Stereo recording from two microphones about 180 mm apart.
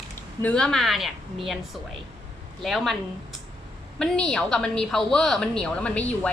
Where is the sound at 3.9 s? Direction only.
5° left (ahead or behind).